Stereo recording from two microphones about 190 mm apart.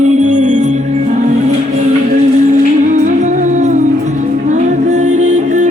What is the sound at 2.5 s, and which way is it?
Music, 40° right (ahead or behind).